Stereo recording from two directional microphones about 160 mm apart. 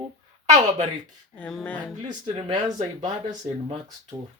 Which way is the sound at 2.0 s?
30° right (ahead or behind).